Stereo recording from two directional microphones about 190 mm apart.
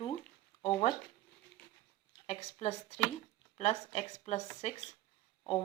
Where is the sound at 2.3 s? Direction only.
35° left (ahead or behind).